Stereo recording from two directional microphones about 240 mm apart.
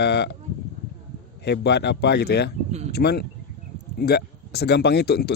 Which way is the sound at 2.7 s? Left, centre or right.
Right.